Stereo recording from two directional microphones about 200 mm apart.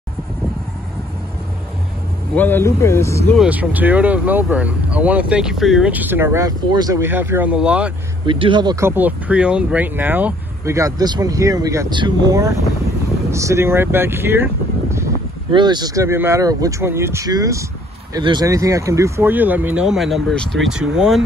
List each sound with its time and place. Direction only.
2.3 s speech: 10° left (ahead or behind)
3.3 s speech: 10° right (ahead or behind)
8.3 s speech: 25° right (ahead or behind); by 21.2 s 5° right (ahead or behind)